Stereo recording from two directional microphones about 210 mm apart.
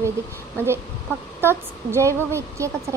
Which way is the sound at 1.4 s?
10° right (ahead or behind).